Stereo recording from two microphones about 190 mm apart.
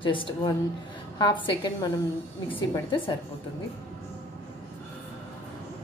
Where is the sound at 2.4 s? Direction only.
25° left (ahead or behind).